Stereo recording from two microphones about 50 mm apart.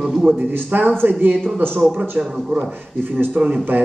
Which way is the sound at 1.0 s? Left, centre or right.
Right.